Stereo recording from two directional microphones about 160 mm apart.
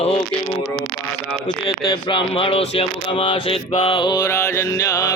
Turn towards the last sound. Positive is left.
turn(degrees=20)  # may be behind; listen again after turning